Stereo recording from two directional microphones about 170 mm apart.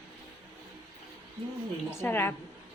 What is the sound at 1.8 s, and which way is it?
Speech, 10° left (ahead or behind).